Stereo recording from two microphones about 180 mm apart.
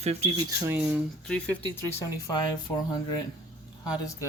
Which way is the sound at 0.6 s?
10° right (ahead or behind).